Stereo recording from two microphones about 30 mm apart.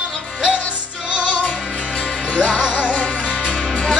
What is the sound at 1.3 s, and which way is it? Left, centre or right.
Music, left.